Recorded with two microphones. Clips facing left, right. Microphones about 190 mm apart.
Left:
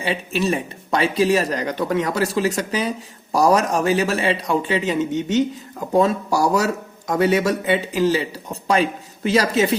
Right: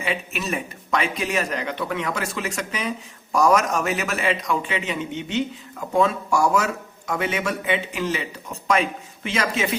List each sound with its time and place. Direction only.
0.0 s speech: 35° left (ahead or behind)